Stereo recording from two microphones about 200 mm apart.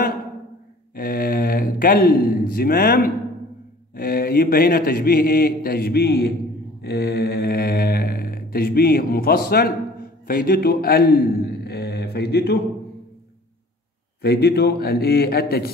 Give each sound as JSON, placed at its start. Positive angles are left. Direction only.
{"t": 0.9, "sound": "a man's voice", "side_deg": 45}
{"t": 14.2, "sound": "speech", "side_deg": 55}